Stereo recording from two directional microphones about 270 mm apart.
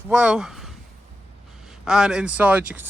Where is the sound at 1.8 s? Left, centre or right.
Centre.